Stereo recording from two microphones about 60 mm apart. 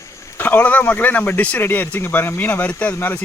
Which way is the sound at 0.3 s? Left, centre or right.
Left.